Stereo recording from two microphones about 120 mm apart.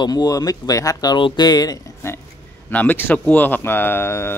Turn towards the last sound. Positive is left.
turn(degrees=20)  # may be behind; listen again after turning